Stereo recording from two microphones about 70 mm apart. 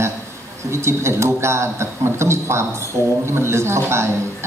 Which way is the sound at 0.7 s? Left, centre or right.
Right.